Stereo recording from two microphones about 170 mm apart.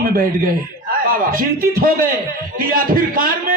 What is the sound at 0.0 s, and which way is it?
Speech, 60° right (ahead or behind).